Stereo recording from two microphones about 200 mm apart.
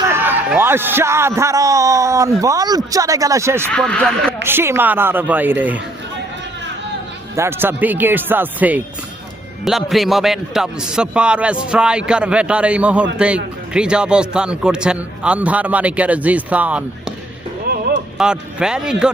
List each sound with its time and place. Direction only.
0.1 s a man's voice: 10° right (ahead or behind)
3.7 s a man's voice: 5° left (ahead or behind)
4.4 s a man's voice: 10° right (ahead or behind)
7.3 s a man's voice: 10° right (ahead or behind)
18.2 s a man's voice: 5° right (ahead or behind)